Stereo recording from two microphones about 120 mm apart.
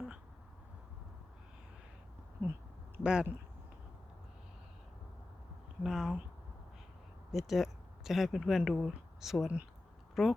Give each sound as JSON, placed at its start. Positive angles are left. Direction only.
{"t": 3.0, "sound": "speech", "side_deg": -10}
{"t": 5.8, "sound": "speech", "side_deg": 0}
{"t": 7.3, "sound": "speech", "side_deg": 0}